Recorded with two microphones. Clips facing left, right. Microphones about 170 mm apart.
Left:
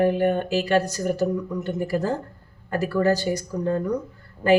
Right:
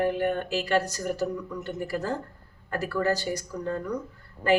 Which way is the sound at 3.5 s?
25° left (ahead or behind).